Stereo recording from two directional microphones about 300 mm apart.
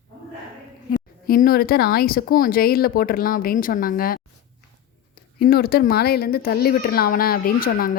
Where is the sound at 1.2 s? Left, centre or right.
Left.